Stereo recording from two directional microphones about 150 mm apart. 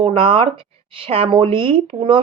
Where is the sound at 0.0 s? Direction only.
35° right (ahead or behind).